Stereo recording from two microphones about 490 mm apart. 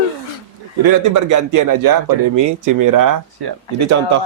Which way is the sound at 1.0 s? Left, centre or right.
Right.